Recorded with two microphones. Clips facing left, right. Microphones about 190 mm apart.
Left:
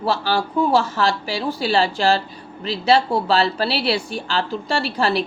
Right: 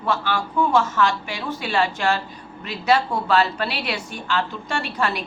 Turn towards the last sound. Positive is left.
turn(degrees=30)  # may be behind; listen again after turning